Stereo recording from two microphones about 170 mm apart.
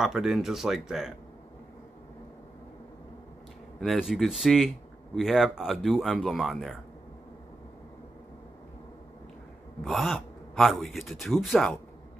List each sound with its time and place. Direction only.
0.0 s speech: centre (ahead or behind)
3.8 s speech: centre (ahead or behind)
9.8 s speech: centre (ahead or behind)